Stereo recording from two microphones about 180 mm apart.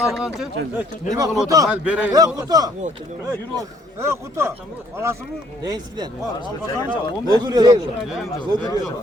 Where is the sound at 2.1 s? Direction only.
20° right (ahead or behind).